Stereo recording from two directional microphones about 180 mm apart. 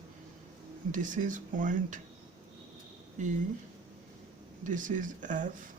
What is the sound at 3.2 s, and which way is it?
Speech, 40° right (ahead or behind).